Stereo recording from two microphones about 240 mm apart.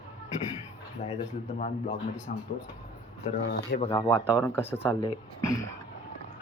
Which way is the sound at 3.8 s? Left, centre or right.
Centre.